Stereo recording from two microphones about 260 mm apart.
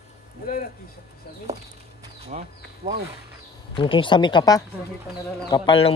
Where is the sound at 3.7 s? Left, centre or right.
Centre.